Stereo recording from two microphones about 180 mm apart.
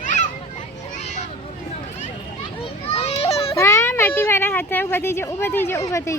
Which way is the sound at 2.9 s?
35° left (ahead or behind).